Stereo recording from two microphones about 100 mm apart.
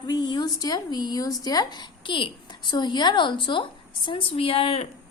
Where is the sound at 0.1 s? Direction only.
45° left (ahead or behind); by 4.9 s 70° left (ahead or behind).